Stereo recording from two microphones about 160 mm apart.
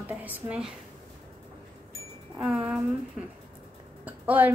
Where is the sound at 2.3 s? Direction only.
10° right (ahead or behind).